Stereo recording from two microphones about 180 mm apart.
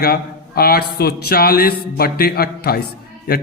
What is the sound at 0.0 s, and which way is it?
A man's voice, 55° left (ahead or behind).